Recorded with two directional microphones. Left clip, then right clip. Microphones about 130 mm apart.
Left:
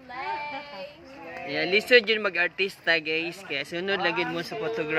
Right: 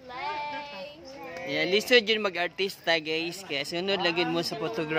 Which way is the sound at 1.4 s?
35° right (ahead or behind).